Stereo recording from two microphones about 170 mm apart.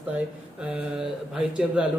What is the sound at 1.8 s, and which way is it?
Speech, 5° right (ahead or behind).